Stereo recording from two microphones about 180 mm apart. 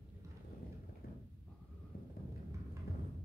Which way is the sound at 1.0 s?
55° left (ahead or behind).